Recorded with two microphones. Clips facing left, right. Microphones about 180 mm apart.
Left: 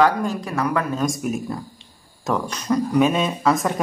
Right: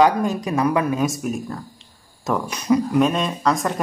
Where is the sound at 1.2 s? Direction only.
Centre (ahead or behind).